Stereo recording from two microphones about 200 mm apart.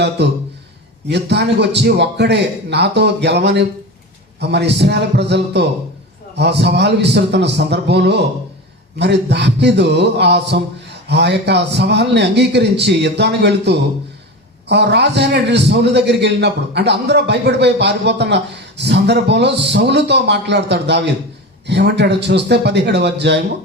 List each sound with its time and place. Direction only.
0.2 s a man's voice: 60° right (ahead or behind)